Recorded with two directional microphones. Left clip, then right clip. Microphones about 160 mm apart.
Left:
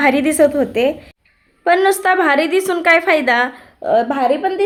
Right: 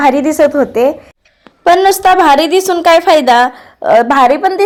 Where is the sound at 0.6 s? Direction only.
10° right (ahead or behind).